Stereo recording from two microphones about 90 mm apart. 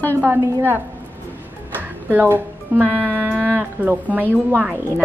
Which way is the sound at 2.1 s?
20° right (ahead or behind).